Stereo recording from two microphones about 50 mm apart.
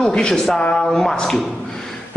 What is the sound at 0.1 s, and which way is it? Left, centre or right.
A man's voice, centre.